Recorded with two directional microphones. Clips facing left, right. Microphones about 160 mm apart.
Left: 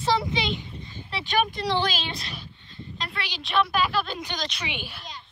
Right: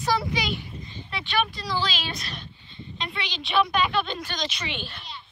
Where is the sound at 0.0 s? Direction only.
25° left (ahead or behind).